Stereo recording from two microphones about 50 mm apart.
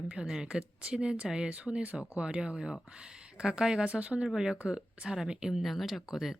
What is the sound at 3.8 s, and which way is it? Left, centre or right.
Speech, right.